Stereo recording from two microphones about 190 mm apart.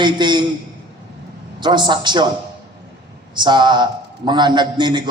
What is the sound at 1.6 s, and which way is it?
Speech, 25° right (ahead or behind).